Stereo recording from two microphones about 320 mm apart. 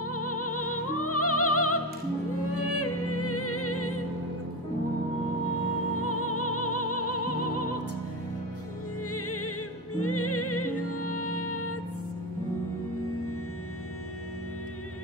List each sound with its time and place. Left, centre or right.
0.0 s music: left
5.9 s music: left
9.1 s music: left